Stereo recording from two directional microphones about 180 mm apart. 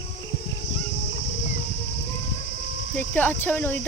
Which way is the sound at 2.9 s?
10° left (ahead or behind).